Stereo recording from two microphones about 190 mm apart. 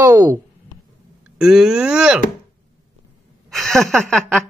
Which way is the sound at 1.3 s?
5° right (ahead or behind).